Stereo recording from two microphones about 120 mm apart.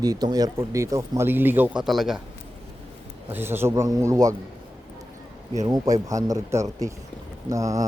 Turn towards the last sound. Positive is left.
turn(degrees=-25)  # may be behind; listen again after turning